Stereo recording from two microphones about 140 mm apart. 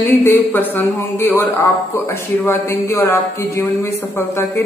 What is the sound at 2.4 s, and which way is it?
A woman's voice, 20° left (ahead or behind).